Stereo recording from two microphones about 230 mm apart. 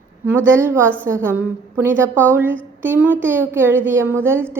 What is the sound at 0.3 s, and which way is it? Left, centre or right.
A woman's voice, centre.